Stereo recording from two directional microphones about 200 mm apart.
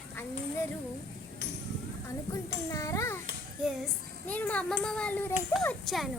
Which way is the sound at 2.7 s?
15° left (ahead or behind).